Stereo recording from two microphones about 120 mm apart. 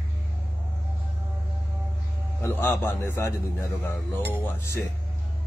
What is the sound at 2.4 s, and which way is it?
A man's voice, 20° left (ahead or behind).